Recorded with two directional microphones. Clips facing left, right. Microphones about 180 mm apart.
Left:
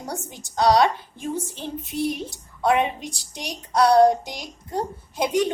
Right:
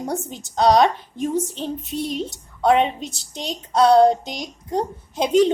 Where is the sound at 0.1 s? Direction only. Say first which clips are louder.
Right 6 dB; 20° right (ahead or behind).